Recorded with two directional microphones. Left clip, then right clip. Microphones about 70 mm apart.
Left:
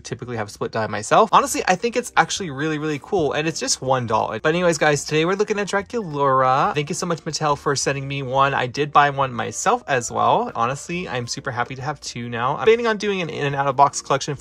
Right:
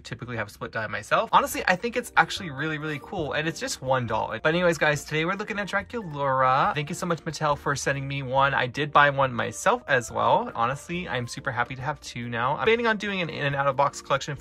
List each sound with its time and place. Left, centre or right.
0.7 s speech: left
1.3 s speech: left
8.7 s speech: centre; by 14.3 s left